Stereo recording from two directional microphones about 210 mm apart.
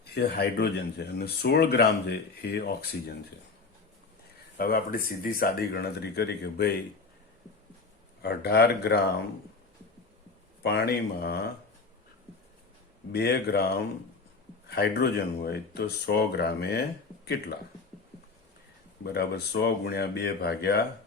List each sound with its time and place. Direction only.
0.0 s speech: 50° left (ahead or behind)
4.5 s speech: 45° left (ahead or behind)
8.2 s speech: 50° left (ahead or behind)
10.6 s speech: 50° left (ahead or behind)
13.1 s speech: 50° left (ahead or behind)
14.7 s speech: 50° left (ahead or behind)
19.0 s speech: 50° left (ahead or behind)